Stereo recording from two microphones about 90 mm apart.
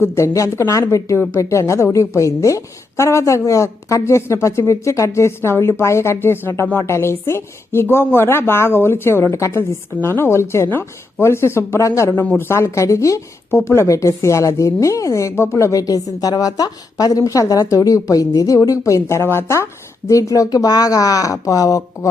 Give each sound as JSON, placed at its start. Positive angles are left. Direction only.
{"t": 0.0, "sound": "speech", "side_deg": 35}